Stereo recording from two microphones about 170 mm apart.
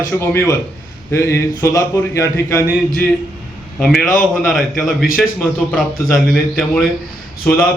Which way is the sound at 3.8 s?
5° left (ahead or behind).